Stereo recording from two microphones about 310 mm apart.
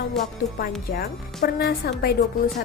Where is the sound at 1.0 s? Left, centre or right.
Left.